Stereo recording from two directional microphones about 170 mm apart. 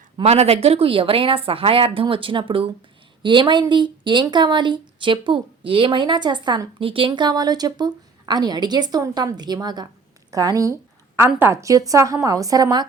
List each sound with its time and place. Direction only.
0.2 s a woman's voice: 35° right (ahead or behind)